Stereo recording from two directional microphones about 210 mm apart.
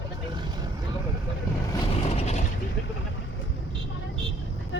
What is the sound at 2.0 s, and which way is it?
Mechanisms, 30° left (ahead or behind).